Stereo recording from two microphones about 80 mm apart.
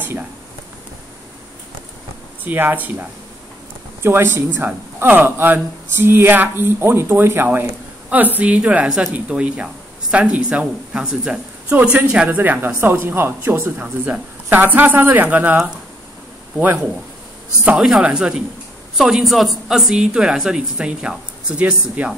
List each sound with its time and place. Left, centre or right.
2.4 s a woman's voice: right
12.3 s speech: right
18.0 s a woman's voice: centre